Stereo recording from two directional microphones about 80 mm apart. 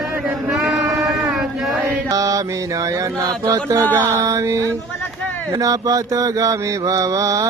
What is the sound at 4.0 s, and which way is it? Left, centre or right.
Mantra, right.